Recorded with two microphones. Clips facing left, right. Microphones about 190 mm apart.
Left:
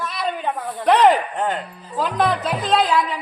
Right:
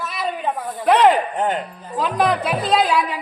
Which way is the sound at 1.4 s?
20° right (ahead or behind).